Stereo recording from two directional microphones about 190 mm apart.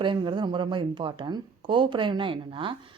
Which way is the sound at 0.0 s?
25° right (ahead or behind).